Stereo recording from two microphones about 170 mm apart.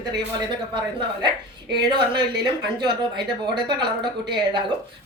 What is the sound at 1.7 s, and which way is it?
A woman's voice, 25° right (ahead or behind).